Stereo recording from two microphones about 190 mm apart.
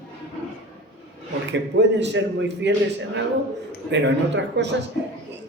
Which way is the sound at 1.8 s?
70° right (ahead or behind).